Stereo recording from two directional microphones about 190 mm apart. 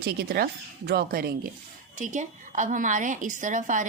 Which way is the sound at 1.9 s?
40° right (ahead or behind).